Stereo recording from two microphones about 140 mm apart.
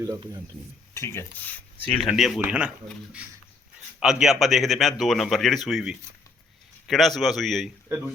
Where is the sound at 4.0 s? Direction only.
5° right (ahead or behind).